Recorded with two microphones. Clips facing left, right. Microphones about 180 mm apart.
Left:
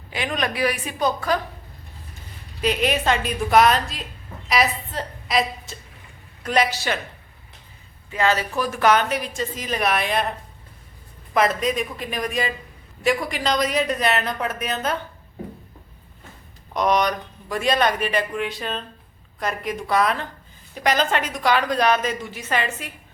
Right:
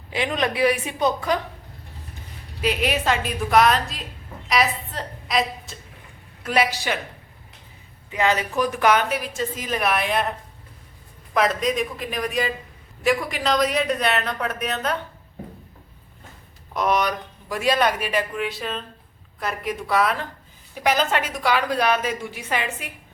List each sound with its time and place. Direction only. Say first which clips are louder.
0.1 s a woman's voice: right 2 dB; 25° right (ahead or behind)
2.6 s a woman's voice: left 1 dB; 5° right (ahead or behind)
8.1 s a woman's voice: even; 15° right (ahead or behind); by 10.2 s centre (ahead or behind)
11.3 s speech: even; centre (ahead or behind)
16.7 s a woman's voice: left 2 dB; 5° right (ahead or behind)